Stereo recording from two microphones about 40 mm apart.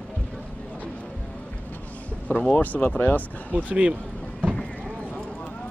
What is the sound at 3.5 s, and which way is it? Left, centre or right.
Speech, right.